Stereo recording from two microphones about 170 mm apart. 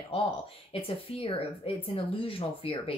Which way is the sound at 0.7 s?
35° left (ahead or behind).